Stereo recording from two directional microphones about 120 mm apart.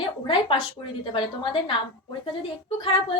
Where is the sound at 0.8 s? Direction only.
40° left (ahead or behind).